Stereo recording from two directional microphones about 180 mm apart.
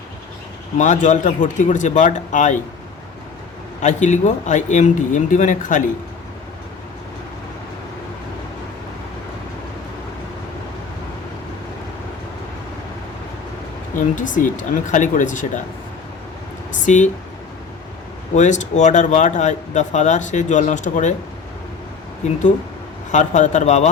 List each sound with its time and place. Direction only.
0.8 s speech: 45° left (ahead or behind)
3.8 s speech: 40° left (ahead or behind)
13.9 s speech: 45° left (ahead or behind)
16.8 s speech: 45° left (ahead or behind)
18.3 s speech: 40° left (ahead or behind)
23.1 s speech: 40° left (ahead or behind)